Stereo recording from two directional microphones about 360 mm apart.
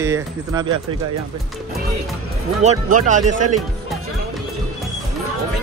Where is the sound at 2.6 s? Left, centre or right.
Centre.